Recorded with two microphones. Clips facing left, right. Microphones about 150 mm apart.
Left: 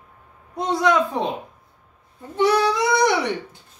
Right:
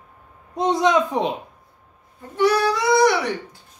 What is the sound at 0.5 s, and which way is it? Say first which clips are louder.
Speech: right 1 dB; 20° right (ahead or behind).